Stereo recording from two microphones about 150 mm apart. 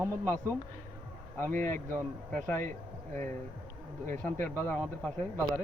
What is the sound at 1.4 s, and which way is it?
Speech, 15° left (ahead or behind).